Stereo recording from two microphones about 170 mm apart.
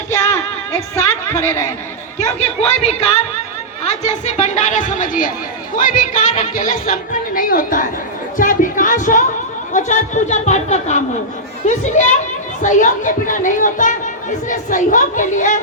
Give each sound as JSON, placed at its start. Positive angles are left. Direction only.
{"t": 0.1, "sound": "music", "side_deg": 15}
{"t": 2.6, "sound": "speech", "side_deg": 40}